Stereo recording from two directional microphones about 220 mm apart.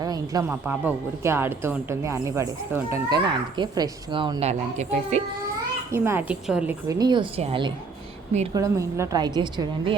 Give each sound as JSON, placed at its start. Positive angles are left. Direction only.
{"t": 0.0, "sound": "speech", "side_deg": -15}
{"t": 0.6, "sound": "speech", "side_deg": -5}
{"t": 5.9, "sound": "speech", "side_deg": -10}
{"t": 6.8, "sound": "a woman's voice", "side_deg": -20}
{"t": 8.5, "sound": "speech", "side_deg": -15}